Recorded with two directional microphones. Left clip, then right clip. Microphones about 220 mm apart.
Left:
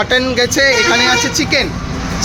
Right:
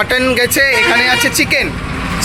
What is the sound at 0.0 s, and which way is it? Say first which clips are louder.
Speech: right 1 dB; 5° right (ahead or behind).